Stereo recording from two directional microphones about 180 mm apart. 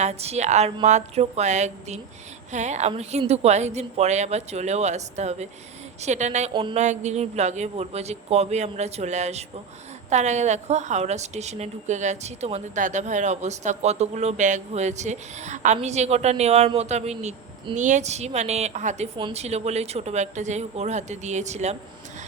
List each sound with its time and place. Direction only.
0.0 s a woman's voice: 35° right (ahead or behind)
6.5 s a sound: 25° right (ahead or behind)
6.7 s a woman's voice: 40° right (ahead or behind)